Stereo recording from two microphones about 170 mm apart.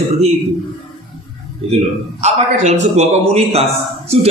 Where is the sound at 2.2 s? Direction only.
40° right (ahead or behind).